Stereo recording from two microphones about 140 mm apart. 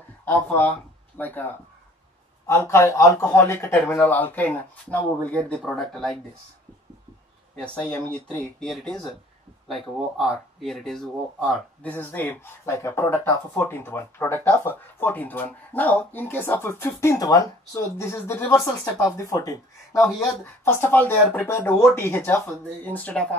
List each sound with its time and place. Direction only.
0.2 s speech: 10° left (ahead or behind)
7.6 s speech: 5° left (ahead or behind)